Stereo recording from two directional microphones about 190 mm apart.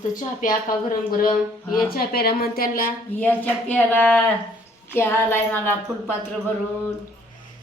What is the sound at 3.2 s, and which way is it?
A woman's voice, 10° left (ahead or behind).